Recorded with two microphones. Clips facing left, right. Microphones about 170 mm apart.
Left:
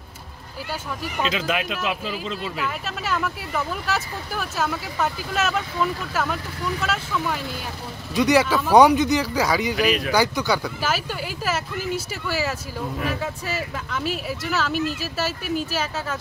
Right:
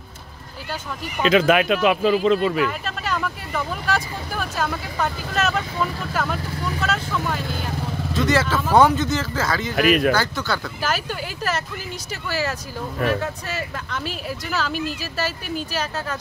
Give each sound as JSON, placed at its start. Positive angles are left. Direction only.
{"t": 1.2, "sound": "speech", "side_deg": -60}
{"t": 2.6, "sound": "speech", "side_deg": 5}
{"t": 8.1, "sound": "speech", "side_deg": 15}
{"t": 9.8, "sound": "speech", "side_deg": -55}
{"t": 10.1, "sound": "speech", "side_deg": 15}